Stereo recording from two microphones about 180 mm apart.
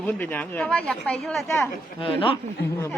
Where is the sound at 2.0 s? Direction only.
30° left (ahead or behind).